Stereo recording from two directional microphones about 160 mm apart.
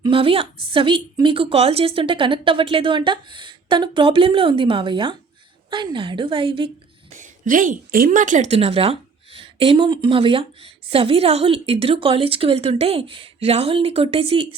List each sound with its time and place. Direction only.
0.0 s a woman's voice: 35° right (ahead or behind)
7.1 s a woman's voice: 55° right (ahead or behind); by 14.4 s 35° right (ahead or behind)